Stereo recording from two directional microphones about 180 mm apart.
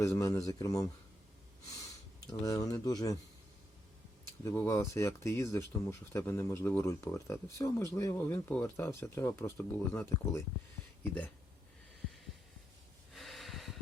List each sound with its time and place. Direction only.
0.0 s speech: 15° left (ahead or behind)
2.2 s speech: 20° left (ahead or behind)
4.4 s speech: 15° left (ahead or behind)
13.1 s snort: centre (ahead or behind)